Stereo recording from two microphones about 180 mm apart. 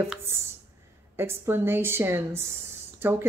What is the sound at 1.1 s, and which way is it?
Speech, 15° right (ahead or behind).